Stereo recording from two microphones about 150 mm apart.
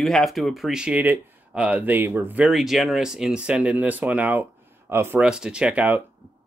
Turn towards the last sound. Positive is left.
turn(degrees=-10)  # may be behind; listen again after turning